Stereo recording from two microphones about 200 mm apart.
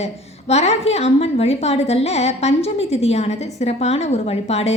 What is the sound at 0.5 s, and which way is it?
A woman's voice, 35° left (ahead or behind).